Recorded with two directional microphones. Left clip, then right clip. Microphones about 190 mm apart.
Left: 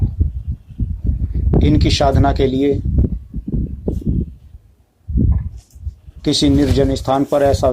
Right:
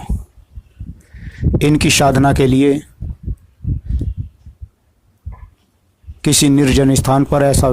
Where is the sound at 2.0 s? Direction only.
50° right (ahead or behind).